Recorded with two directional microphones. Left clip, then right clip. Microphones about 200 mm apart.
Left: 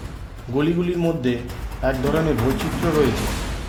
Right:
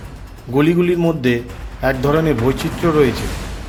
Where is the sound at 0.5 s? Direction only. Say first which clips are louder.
Right 7 dB; 20° right (ahead or behind).